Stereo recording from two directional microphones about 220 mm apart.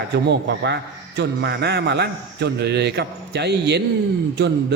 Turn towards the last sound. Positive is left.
turn(degrees=-50)  # may be behind; listen again after turning